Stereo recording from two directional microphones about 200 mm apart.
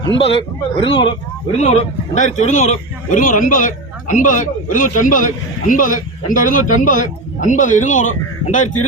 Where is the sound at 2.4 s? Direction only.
35° left (ahead or behind).